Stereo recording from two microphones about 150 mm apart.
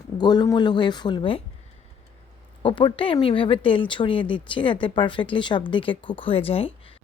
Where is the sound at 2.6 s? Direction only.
35° left (ahead or behind).